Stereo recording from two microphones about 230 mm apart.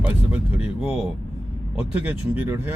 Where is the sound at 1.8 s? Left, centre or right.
Centre.